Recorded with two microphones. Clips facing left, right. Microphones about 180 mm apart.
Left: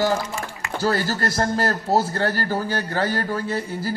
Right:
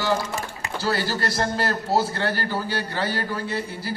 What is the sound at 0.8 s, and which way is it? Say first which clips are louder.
A man's voice: left 3 dB; 45° left (ahead or behind).